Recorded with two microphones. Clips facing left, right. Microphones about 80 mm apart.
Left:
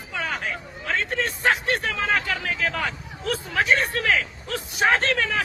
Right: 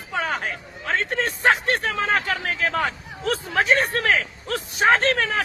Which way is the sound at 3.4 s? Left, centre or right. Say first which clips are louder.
Right 1 dB; right.